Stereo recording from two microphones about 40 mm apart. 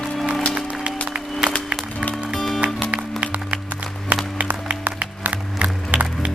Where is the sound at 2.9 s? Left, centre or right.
Right.